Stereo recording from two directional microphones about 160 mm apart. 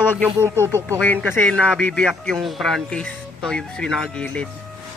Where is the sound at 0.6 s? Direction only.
15° left (ahead or behind).